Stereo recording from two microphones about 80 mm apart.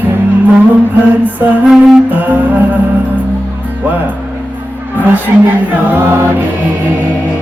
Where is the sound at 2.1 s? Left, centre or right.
Right.